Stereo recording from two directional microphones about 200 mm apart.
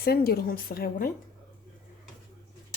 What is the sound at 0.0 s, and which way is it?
A woman's voice, 50° left (ahead or behind).